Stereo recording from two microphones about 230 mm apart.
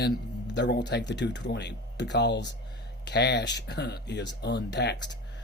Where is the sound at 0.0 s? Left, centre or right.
Left.